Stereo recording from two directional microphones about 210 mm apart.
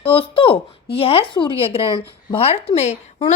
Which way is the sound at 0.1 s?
25° left (ahead or behind).